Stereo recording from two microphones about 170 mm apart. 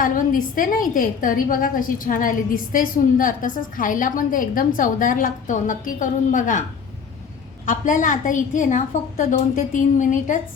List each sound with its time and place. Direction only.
0.0 s a woman's voice: 55° left (ahead or behind)